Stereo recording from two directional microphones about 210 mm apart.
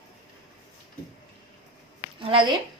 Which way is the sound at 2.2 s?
25° right (ahead or behind).